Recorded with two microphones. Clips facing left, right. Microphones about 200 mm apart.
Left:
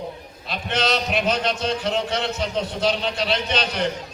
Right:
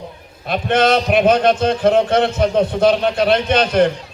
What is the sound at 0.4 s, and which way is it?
A man's voice, 55° right (ahead or behind).